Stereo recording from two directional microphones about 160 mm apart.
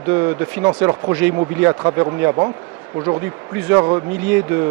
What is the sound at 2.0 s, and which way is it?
Speech, 20° right (ahead or behind).